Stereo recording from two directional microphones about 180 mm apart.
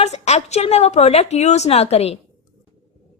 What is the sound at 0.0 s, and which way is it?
A woman's voice, 35° left (ahead or behind).